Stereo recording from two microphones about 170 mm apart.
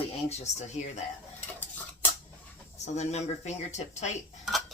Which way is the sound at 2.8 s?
40° left (ahead or behind).